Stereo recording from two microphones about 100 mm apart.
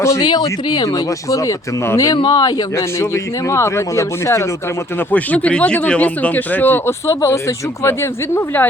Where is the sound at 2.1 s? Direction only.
45° left (ahead or behind).